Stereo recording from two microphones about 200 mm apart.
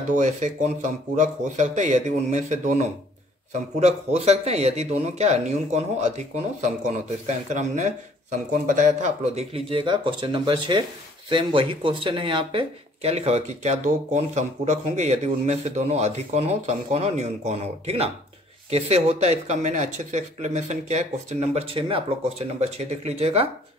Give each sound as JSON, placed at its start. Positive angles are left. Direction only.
{"t": 0.1, "sound": "speech", "side_deg": -35}